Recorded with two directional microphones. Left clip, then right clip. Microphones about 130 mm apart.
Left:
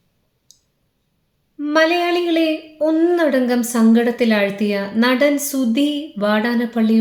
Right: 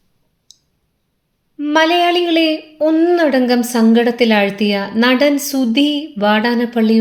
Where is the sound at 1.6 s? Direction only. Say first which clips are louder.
Right 3 dB; 15° right (ahead or behind).